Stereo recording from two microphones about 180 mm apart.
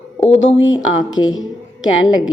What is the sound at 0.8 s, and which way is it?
A woman's voice, 90° left.